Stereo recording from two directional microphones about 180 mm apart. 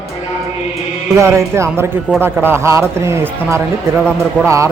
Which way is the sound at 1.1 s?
15° right (ahead or behind).